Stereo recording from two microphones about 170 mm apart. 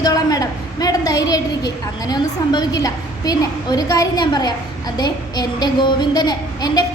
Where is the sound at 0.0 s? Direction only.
20° left (ahead or behind).